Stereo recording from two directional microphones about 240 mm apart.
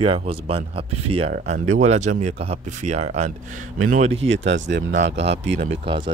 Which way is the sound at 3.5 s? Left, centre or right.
Right.